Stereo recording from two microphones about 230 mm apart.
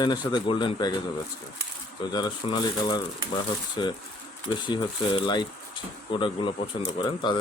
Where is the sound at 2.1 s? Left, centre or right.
Centre.